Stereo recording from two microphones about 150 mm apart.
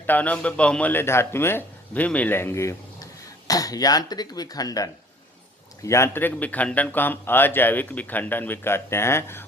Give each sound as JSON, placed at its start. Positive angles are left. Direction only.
{"t": 0.0, "sound": "speech", "side_deg": 10}